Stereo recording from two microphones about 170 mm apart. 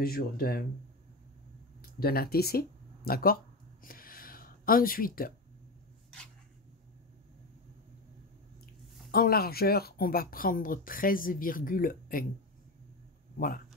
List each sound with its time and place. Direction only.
0.0 s speech: 60° left (ahead or behind)
1.8 s speech: 65° left (ahead or behind)
3.8 s a sound: 60° left (ahead or behind)
9.1 s speech: 60° left (ahead or behind)